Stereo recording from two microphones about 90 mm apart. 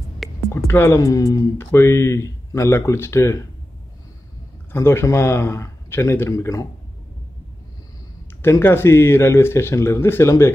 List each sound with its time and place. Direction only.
0.2 s music: centre (ahead or behind)
0.7 s speech: 30° left (ahead or behind)
4.7 s speech: 30° left (ahead or behind)
8.4 s speech: 25° left (ahead or behind)